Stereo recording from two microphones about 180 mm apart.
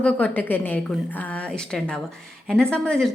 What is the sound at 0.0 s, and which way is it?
A woman's voice, 10° left (ahead or behind).